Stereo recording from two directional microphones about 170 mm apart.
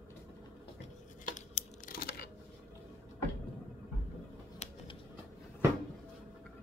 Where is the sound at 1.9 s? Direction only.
60° left (ahead or behind).